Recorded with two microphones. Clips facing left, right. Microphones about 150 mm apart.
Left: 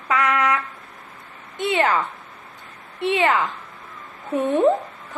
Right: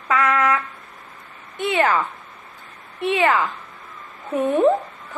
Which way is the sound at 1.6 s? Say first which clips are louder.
Right 1 dB; 20° left (ahead or behind).